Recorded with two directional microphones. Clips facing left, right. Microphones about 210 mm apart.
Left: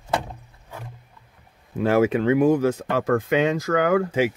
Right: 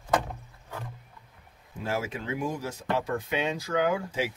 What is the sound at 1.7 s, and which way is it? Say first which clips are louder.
Speech: left 13 dB; 65° left (ahead or behind).